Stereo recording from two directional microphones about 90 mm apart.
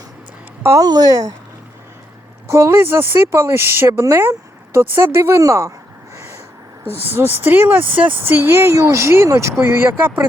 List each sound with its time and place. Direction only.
0.8 s speech: 45° right (ahead or behind)
2.5 s speech: 30° right (ahead or behind)
7.0 s speech: 25° right (ahead or behind)